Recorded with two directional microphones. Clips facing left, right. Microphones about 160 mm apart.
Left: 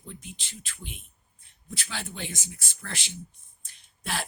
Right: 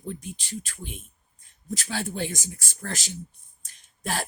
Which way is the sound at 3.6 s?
40° right (ahead or behind).